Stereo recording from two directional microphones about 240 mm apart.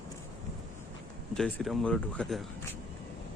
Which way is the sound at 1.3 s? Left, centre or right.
Centre.